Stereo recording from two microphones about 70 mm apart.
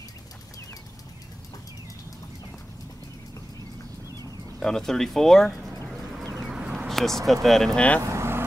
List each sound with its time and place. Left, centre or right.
4.6 s speech: centre
5.9 s vehicle: centre
6.5 s a sound: centre
6.9 s speech: centre
8.0 s vehicle: right